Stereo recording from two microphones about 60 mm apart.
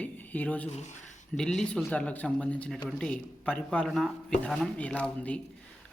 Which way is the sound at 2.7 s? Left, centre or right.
Centre.